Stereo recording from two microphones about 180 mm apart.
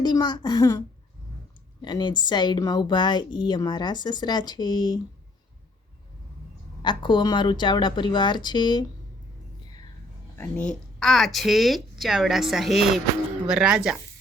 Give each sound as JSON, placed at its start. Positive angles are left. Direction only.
{"t": 0.0, "sound": "a woman's voice", "side_deg": 25}
{"t": 1.8, "sound": "a woman's voice", "side_deg": 25}
{"t": 6.8, "sound": "a woman's voice", "side_deg": 25}
{"t": 10.3, "sound": "speech", "side_deg": 10}